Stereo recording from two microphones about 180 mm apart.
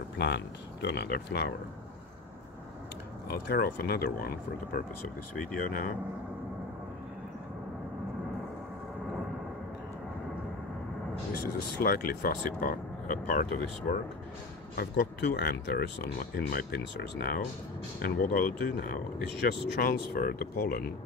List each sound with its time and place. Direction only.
0.2 s speech: 70° left (ahead or behind)
3.3 s speech: 60° left (ahead or behind)
11.8 s speech: 55° left (ahead or behind)
18.0 s speech: 50° left (ahead or behind)